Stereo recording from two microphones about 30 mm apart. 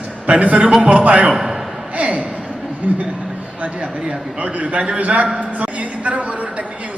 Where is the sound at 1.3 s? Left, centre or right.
Centre.